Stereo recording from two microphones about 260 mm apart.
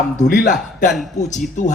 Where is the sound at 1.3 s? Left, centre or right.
Left.